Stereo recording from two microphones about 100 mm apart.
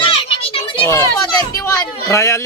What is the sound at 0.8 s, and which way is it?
Speech, 30° left (ahead or behind).